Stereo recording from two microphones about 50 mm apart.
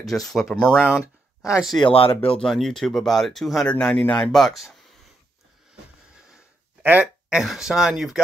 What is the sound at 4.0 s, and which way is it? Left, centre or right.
Speech, left.